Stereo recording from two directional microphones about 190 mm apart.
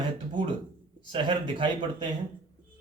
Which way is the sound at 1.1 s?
25° right (ahead or behind).